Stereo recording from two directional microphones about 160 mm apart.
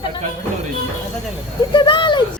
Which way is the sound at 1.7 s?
30° left (ahead or behind).